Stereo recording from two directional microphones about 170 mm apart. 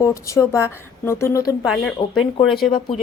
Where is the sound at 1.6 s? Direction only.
Centre (ahead or behind).